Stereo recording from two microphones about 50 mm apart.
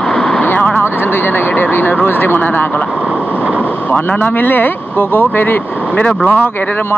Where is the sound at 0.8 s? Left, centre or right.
Left.